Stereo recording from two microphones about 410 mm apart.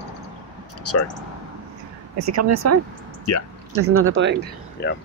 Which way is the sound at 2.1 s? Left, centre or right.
Right.